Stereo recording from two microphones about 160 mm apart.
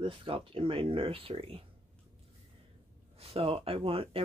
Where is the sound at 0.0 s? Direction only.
35° right (ahead or behind).